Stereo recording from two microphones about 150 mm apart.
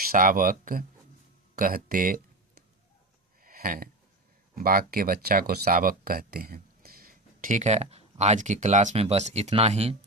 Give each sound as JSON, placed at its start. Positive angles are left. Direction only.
{"t": 0.1, "sound": "speech", "side_deg": -65}
{"t": 3.4, "sound": "a sound", "side_deg": -70}
{"t": 4.5, "sound": "speech", "side_deg": -70}